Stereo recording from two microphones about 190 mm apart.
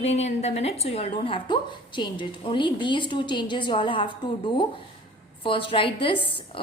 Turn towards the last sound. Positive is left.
turn(degrees=25)  # may be behind; listen again after turning